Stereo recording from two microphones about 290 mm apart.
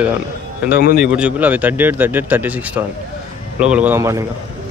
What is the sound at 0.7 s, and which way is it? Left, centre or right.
Speech, left.